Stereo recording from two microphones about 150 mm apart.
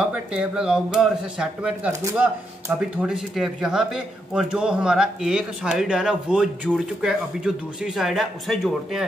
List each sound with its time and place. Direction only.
0.0 s speech: 5° right (ahead or behind)